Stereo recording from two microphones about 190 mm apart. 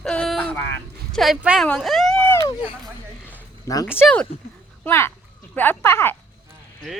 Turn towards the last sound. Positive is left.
turn(degrees=10)  # may be behind; listen again after turning